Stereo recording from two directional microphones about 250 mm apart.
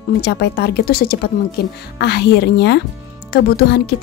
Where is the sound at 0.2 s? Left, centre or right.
Left.